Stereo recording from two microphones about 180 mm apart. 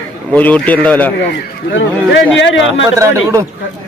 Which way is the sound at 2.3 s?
90° left.